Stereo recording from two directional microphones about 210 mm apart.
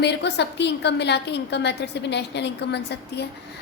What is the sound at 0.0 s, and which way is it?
A woman's voice, 55° left (ahead or behind).